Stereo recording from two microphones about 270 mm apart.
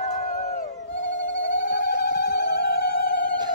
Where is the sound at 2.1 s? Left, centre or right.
Left.